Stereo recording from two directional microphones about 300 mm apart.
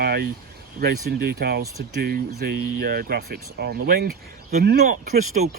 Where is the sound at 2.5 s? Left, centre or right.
Right.